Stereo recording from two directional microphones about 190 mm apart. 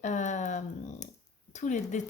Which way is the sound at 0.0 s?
40° left (ahead or behind).